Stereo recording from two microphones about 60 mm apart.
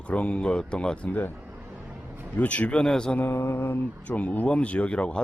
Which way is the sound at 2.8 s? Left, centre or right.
Centre.